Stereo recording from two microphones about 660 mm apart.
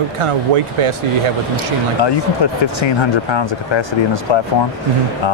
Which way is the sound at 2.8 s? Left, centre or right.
Left.